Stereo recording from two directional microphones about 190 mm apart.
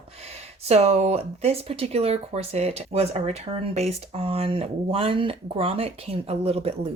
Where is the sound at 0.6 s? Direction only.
35° right (ahead or behind).